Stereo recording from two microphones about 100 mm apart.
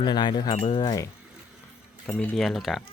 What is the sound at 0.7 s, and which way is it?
Wind chime, 40° left (ahead or behind).